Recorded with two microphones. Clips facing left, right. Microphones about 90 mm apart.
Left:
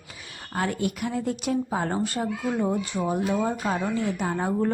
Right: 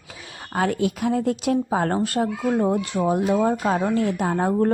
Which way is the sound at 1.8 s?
70° right (ahead or behind).